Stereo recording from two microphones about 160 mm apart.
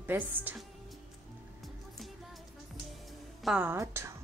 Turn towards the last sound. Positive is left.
turn(degrees=-20)  # may be behind; listen again after turning